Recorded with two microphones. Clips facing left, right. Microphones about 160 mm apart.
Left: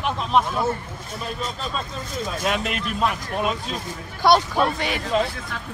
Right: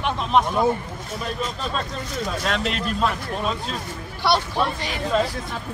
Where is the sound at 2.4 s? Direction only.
5° left (ahead or behind).